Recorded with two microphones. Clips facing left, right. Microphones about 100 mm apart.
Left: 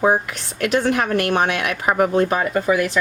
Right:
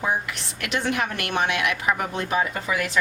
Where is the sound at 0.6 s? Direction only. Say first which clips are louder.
Left 7 dB; 40° left (ahead or behind).